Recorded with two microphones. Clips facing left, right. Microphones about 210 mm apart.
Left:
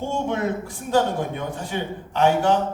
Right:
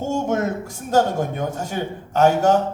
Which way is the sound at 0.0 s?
45° right (ahead or behind).